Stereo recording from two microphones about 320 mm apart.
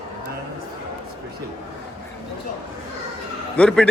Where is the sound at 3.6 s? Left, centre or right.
Centre.